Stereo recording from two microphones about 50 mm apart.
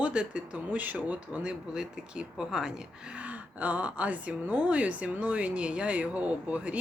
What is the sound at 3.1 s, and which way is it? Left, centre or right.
Speech, right.